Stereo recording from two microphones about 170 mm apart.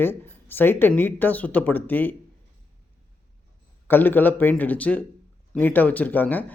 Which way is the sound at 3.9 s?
10° left (ahead or behind).